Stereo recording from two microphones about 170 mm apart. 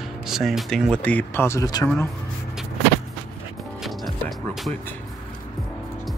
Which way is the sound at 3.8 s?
Centre (ahead or behind).